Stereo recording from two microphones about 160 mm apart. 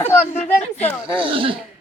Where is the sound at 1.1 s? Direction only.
35° right (ahead or behind).